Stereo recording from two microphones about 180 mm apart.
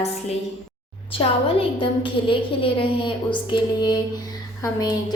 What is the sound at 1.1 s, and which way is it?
A woman's voice, 30° left (ahead or behind).